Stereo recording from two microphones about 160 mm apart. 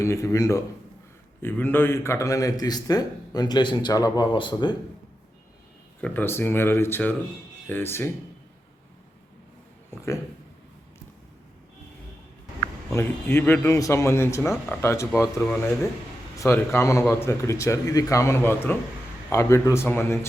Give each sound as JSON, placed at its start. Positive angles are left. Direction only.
{"t": 0.0, "sound": "speech", "side_deg": 20}
{"t": 6.0, "sound": "a man's voice", "side_deg": 10}
{"t": 12.9, "sound": "a man's voice", "side_deg": 15}